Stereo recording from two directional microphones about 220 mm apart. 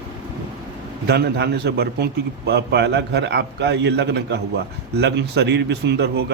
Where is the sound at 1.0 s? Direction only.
50° right (ahead or behind).